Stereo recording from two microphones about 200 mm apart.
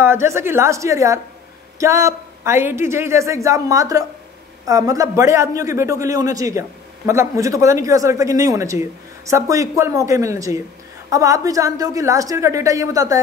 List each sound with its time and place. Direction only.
0.0 s a woman's voice: 10° right (ahead or behind)